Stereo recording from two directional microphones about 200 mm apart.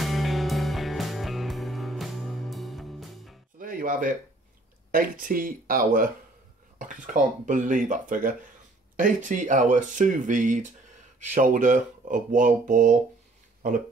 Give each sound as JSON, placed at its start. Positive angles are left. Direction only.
{"t": 0.0, "sound": "music", "side_deg": 0}
{"t": 3.5, "sound": "music", "side_deg": -45}
{"t": 4.9, "sound": "speech", "side_deg": -45}